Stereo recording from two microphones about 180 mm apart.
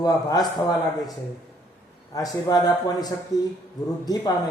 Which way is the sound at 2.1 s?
20° left (ahead or behind).